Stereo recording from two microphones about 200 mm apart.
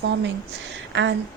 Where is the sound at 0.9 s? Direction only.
65° right (ahead or behind).